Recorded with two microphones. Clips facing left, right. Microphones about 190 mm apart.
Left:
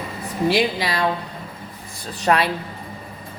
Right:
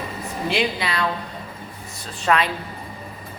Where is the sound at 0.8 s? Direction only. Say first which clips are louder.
Left 3 dB; 35° left (ahead or behind).